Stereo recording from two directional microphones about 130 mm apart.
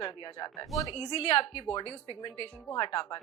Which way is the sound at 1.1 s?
50° left (ahead or behind).